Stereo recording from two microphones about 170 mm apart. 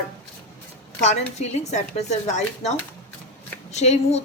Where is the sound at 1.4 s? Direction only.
40° left (ahead or behind).